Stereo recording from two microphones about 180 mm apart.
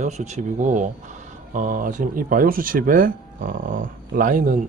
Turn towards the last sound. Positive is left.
turn(degrees=-45)  # may be behind; listen again after turning